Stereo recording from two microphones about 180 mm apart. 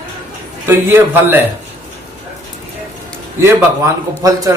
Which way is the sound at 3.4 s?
15° right (ahead or behind).